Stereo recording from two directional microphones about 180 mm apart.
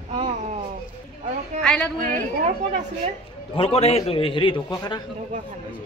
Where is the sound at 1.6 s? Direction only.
5° left (ahead or behind).